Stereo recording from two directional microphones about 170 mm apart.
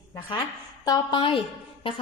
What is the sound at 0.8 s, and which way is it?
Speech, 30° left (ahead or behind).